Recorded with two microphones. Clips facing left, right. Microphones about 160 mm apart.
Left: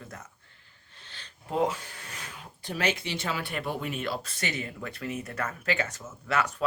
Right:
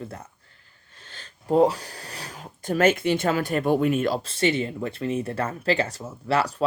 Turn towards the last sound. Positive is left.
turn(degrees=-35)  # may be behind; listen again after turning